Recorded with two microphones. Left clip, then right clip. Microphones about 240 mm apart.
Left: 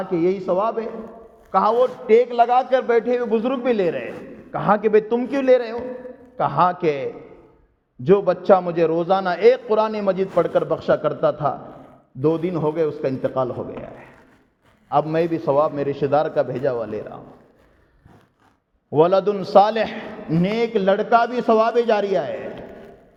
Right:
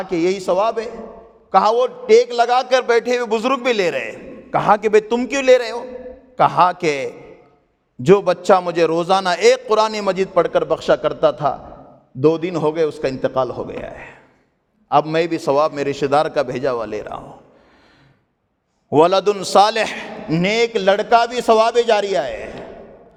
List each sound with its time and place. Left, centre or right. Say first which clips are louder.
0.0 s a man's voice: right 2 dB; right
18.9 s a man's voice: right 3 dB; right